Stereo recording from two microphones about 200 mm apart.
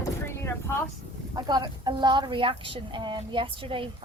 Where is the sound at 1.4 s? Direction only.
20° right (ahead or behind).